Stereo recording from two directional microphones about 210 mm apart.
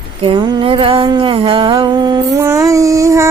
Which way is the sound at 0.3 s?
25° right (ahead or behind).